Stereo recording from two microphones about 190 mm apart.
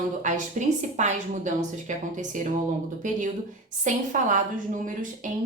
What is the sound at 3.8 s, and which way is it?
Speech, 40° right (ahead or behind).